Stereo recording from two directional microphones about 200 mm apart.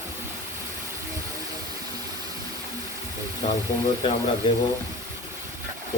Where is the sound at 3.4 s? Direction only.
30° left (ahead or behind).